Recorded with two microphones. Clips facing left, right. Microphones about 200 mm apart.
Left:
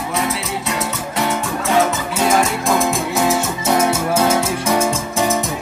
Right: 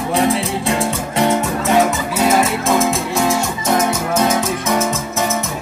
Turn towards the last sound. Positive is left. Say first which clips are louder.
# left 1 dB
turn(degrees=10)  # may be behind; listen again after turning